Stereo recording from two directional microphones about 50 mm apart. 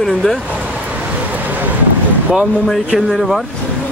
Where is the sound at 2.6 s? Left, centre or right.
Centre.